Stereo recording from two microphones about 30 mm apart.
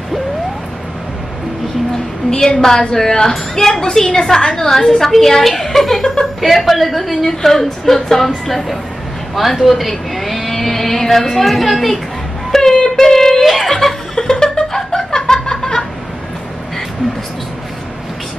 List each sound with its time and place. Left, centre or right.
2.3 s a woman's voice: left; by 8.3 s centre
9.3 s speech: centre
12.4 s a sound: centre
12.9 s child singing: centre
13.7 s music: centre
14.1 s snicker: left